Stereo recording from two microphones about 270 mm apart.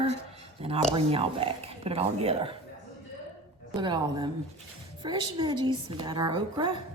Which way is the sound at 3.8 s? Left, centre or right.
Centre.